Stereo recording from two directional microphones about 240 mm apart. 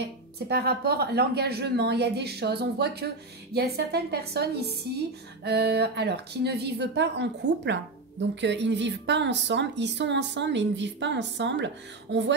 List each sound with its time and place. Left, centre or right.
0.5 s a woman's voice: right